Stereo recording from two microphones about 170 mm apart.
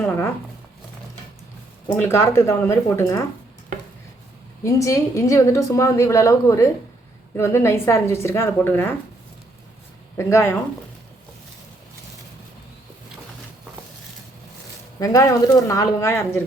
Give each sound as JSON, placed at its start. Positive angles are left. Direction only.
{"t": 0.0, "sound": "a woman's voice", "side_deg": 10}
{"t": 2.0, "sound": "a woman's voice", "side_deg": 15}
{"t": 4.6, "sound": "a woman's voice", "side_deg": 20}
{"t": 10.2, "sound": "a woman's voice", "side_deg": 15}
{"t": 14.9, "sound": "speech", "side_deg": 20}